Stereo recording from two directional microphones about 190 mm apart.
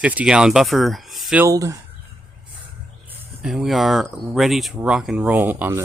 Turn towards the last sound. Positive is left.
turn(degrees=-10)  # may be behind; listen again after turning